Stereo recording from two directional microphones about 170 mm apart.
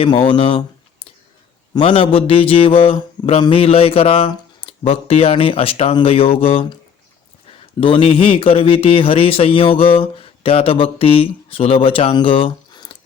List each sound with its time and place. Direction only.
0.0 s speech: 30° left (ahead or behind)
7.8 s speech: 30° left (ahead or behind)